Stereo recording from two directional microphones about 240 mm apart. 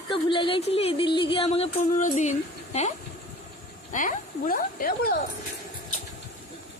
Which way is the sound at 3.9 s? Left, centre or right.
Left.